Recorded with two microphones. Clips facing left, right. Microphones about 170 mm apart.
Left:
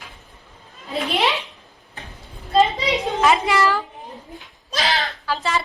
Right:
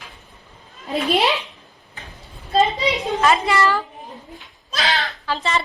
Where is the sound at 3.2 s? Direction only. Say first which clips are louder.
Even; 15° left (ahead or behind).